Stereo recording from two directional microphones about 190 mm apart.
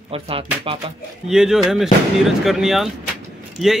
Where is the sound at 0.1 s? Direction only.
30° right (ahead or behind).